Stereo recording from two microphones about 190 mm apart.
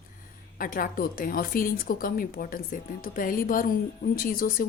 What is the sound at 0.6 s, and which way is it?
A woman's voice, 45° left (ahead or behind).